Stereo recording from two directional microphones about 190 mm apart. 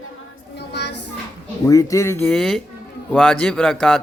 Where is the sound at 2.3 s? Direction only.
Centre (ahead or behind).